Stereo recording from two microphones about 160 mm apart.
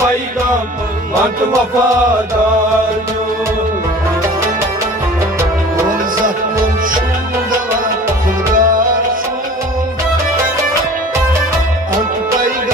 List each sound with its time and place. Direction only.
8.5 s music: 60° right (ahead or behind)
12.4 s music: 60° right (ahead or behind)